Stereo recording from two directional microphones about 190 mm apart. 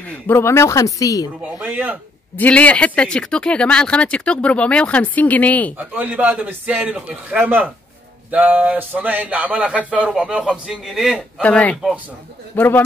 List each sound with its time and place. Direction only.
0.0 s speech: 10° left (ahead or behind)
1.6 s speech: 10° right (ahead or behind)
2.3 s speech: 10° left (ahead or behind)
5.8 s speech: 10° right (ahead or behind); by 12.8 s 10° left (ahead or behind)